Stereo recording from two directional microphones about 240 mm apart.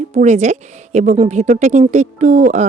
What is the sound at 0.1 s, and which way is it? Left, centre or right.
A woman's voice, right.